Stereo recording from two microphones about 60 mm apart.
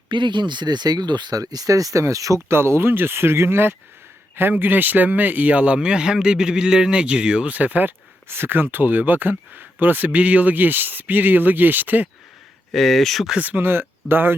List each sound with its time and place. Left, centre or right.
0.9 s speech: right
2.5 s speech: right
4.5 s speech: right
7.5 s speech: right
12.7 s speech: centre
13.4 s speech: right